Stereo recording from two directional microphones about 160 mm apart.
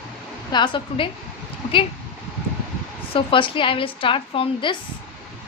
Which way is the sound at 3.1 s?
30° left (ahead or behind).